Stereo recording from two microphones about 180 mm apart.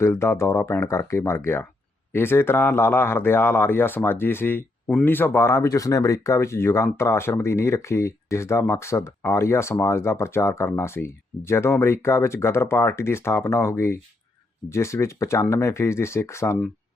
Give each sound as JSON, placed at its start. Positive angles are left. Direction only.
{"t": 0.0, "sound": "speech", "side_deg": 15}